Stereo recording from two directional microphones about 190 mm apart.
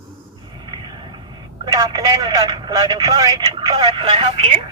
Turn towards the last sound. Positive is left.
turn(degrees=-25)  # may be behind; listen again after turning